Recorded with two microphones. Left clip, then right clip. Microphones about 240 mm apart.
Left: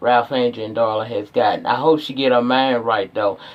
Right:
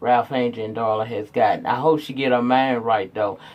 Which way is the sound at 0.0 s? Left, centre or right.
Right.